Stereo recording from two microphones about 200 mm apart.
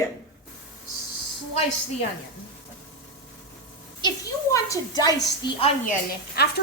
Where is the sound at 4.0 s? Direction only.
20° left (ahead or behind).